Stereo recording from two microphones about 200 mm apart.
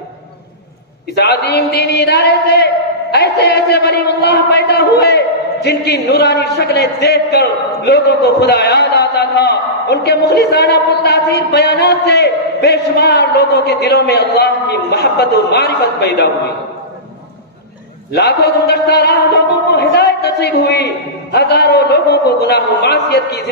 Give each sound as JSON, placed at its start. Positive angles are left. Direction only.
{"t": 1.1, "sound": "a man's voice", "side_deg": 55}
{"t": 18.1, "sound": "a man's voice", "side_deg": 55}